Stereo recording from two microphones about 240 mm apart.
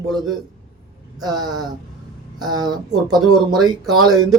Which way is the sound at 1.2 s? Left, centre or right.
Centre.